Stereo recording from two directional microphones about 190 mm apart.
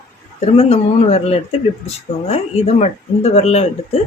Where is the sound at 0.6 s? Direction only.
35° left (ahead or behind).